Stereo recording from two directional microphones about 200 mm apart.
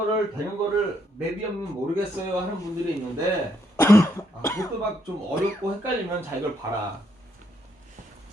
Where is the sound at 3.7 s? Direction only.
15° left (ahead or behind).